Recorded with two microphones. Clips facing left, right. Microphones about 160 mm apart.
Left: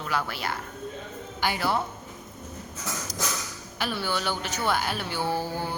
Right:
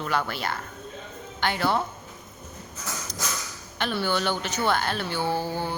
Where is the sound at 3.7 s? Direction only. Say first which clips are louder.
Right 3 dB; 5° left (ahead or behind).